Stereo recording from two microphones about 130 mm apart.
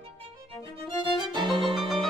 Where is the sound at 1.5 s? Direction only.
Centre (ahead or behind).